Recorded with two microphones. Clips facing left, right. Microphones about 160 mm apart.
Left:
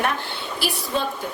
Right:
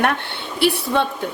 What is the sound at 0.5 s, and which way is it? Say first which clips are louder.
Speech: right 8 dB; 65° right (ahead or behind).